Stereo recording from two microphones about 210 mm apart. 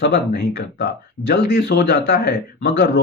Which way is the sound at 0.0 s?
50° left (ahead or behind).